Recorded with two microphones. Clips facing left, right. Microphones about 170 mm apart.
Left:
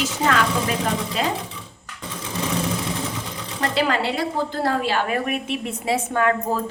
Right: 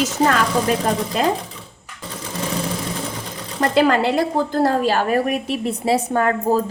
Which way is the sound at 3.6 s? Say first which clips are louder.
Right 6 dB; 50° right (ahead or behind).